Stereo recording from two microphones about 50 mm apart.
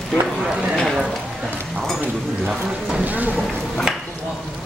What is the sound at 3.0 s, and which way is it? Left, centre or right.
Speech, right.